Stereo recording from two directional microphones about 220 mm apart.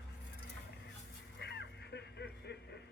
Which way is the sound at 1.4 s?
50° left (ahead or behind).